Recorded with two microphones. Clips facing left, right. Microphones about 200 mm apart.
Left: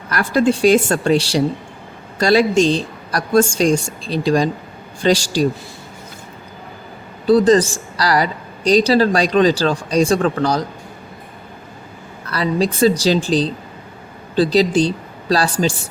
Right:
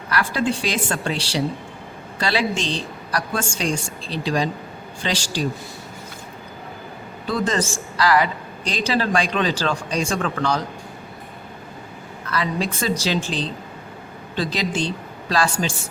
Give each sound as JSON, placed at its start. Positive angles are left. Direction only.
{"t": 0.1, "sound": "a woman's voice", "side_deg": 45}
{"t": 7.3, "sound": "a woman's voice", "side_deg": 35}
{"t": 12.3, "sound": "a woman's voice", "side_deg": 35}